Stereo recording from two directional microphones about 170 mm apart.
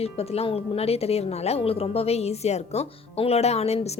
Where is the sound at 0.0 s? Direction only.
35° left (ahead or behind).